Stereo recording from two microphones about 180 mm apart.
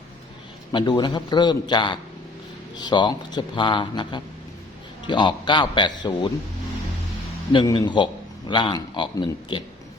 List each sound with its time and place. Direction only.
0.7 s a man's voice: 25° left (ahead or behind)
7.5 s a man's voice: 25° left (ahead or behind)